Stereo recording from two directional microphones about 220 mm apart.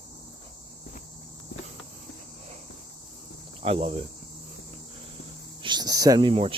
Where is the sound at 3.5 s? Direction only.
25° right (ahead or behind).